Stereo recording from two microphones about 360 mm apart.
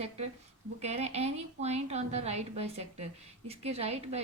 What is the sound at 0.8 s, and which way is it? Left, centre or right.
A woman's voice, centre.